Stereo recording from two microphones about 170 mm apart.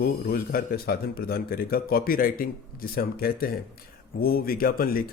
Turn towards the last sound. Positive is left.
turn(degrees=60)  # may be behind; listen again after turning